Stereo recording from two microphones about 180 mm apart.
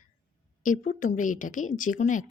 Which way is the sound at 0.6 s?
45° left (ahead or behind).